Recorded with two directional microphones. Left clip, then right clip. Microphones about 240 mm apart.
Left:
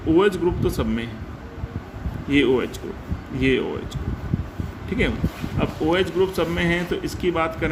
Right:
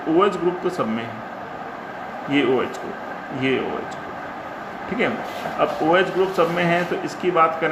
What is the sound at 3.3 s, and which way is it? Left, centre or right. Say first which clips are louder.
Speech: left 1 dB; left.